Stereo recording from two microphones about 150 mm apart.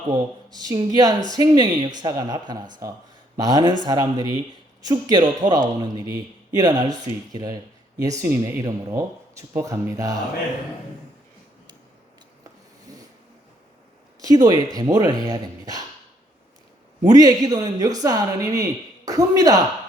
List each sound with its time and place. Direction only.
0.1 s speech: 25° right (ahead or behind)
14.2 s speech: 25° right (ahead or behind)
17.1 s speech: 25° right (ahead or behind)